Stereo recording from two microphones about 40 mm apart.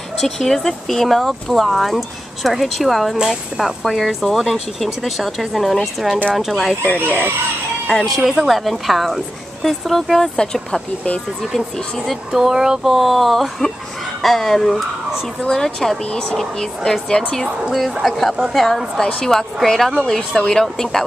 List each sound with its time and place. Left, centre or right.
0.2 s a woman's voice: centre
3.2 s speech: centre
3.8 s a woman's voice: centre
7.0 s speech: right
7.8 s speech: centre
8.2 s a woman's voice: centre
12.3 s speech: centre
12.9 s a woman's voice: centre
16.1 s speech: left
16.3 s speech: centre